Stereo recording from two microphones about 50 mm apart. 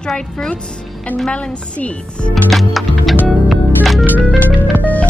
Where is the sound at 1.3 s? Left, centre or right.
Left.